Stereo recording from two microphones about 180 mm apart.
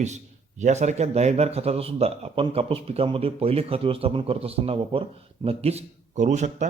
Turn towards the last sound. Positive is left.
turn(degrees=-40)  # may be behind; listen again after turning